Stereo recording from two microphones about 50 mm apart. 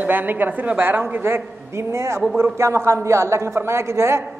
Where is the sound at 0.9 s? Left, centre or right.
Right.